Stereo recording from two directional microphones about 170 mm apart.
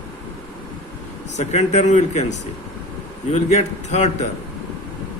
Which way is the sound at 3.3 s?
40° left (ahead or behind).